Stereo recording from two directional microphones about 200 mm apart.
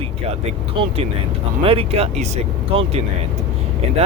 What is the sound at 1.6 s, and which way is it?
Speech, 30° right (ahead or behind).